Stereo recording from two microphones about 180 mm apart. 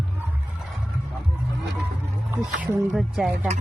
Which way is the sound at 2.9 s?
5° right (ahead or behind).